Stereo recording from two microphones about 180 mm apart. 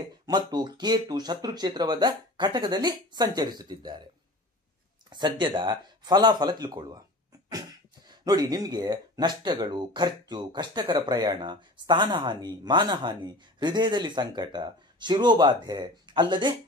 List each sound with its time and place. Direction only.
0.3 s speech: 25° right (ahead or behind)
5.1 s speech: 25° right (ahead or behind)
8.1 s speech: 20° right (ahead or behind)